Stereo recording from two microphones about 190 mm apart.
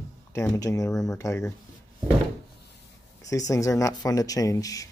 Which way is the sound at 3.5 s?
15° left (ahead or behind).